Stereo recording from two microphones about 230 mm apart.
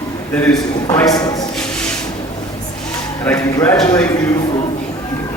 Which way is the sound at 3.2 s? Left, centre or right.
Centre.